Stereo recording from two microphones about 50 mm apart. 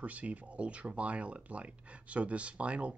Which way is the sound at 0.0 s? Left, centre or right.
Right.